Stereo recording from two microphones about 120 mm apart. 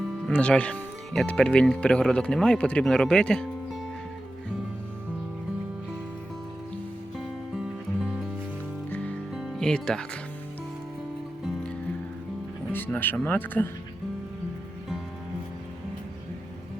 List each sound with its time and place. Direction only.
0.3 s speech: 10° left (ahead or behind)
7.5 s music: 5° right (ahead or behind)
8.9 s music: 10° left (ahead or behind)
9.3 s music: centre (ahead or behind)
12.7 s speech: 15° left (ahead or behind)